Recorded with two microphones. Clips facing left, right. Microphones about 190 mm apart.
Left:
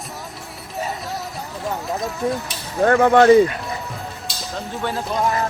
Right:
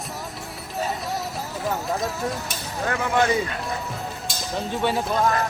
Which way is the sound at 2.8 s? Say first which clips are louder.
Left 9 dB; 60° left (ahead or behind).